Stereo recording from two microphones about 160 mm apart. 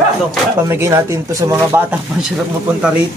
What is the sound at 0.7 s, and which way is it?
Speech, 15° right (ahead or behind).